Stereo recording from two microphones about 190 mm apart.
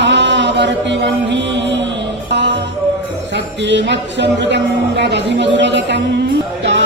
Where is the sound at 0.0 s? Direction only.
65° right (ahead or behind).